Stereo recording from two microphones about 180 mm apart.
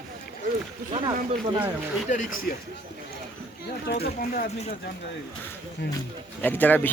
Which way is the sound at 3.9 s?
60° left (ahead or behind).